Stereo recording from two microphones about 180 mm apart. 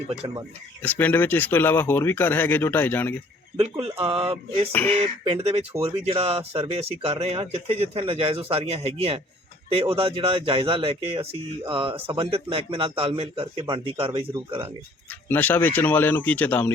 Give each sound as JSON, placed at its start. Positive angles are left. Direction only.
{"t": 0.8, "sound": "speech", "side_deg": 10}
{"t": 3.6, "sound": "speech", "side_deg": -35}
{"t": 15.3, "sound": "speech", "side_deg": 10}